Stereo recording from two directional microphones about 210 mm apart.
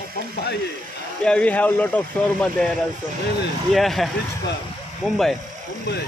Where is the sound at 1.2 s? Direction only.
5° left (ahead or behind).